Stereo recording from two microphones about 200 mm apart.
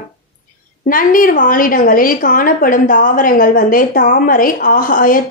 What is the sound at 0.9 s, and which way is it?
A woman's voice, 45° left (ahead or behind).